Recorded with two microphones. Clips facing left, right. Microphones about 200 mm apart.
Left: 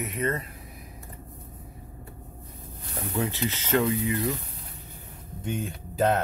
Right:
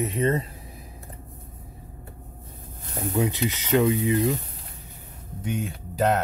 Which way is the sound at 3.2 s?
15° right (ahead or behind).